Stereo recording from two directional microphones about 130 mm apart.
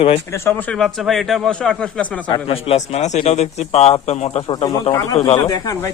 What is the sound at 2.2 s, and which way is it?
Speech, 40° left (ahead or behind).